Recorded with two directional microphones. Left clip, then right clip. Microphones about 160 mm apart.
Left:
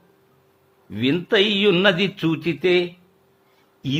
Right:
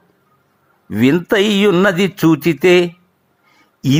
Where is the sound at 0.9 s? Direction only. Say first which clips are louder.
Right 7 dB; 45° right (ahead or behind).